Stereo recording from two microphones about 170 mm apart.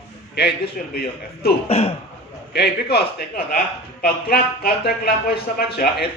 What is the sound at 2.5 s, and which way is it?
Speech, 70° left (ahead or behind).